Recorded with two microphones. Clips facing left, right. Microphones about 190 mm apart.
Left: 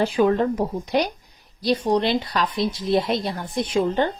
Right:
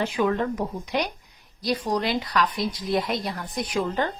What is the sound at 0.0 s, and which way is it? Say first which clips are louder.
A woman's voice: left 5 dB; 35° left (ahead or behind).